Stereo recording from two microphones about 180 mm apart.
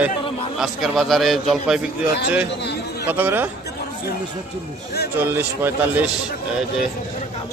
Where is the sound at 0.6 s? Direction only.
Centre (ahead or behind).